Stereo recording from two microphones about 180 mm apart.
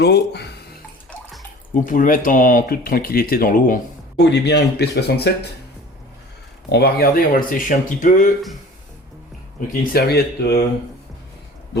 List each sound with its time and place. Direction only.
0.0 s speech: 65° left (ahead or behind)
1.9 s speech: 50° left (ahead or behind)
4.2 s speech: 70° left (ahead or behind)
6.7 s speech: 65° left (ahead or behind); by 8.3 s 45° left (ahead or behind)
9.6 s speech: 60° left (ahead or behind)